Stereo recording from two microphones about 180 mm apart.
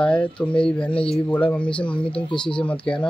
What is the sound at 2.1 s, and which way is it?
Speech, 25° left (ahead or behind).